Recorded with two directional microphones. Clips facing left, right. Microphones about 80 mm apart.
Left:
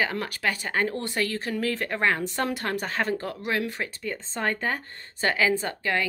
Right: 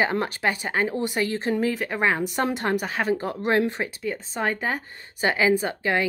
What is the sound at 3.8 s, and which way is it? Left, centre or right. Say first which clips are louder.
Speech: right 4 dB; centre.